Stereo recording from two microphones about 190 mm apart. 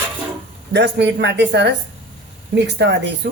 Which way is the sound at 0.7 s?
65° right (ahead or behind).